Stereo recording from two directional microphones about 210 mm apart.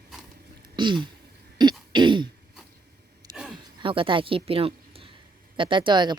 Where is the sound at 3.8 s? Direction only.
25° right (ahead or behind).